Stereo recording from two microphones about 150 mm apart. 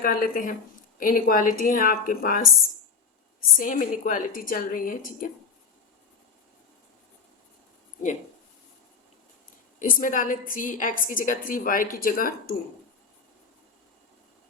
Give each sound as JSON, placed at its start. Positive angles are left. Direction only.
{"t": 0.0, "sound": "a woman's voice", "side_deg": 70}
{"t": 3.6, "sound": "a woman's voice", "side_deg": 60}
{"t": 9.8, "sound": "a woman's voice", "side_deg": 65}